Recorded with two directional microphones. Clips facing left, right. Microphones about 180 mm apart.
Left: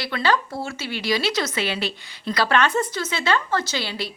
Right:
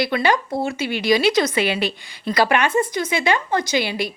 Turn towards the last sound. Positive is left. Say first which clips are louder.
# right 6 dB
turn(degrees=-15)  # may be behind; listen again after turning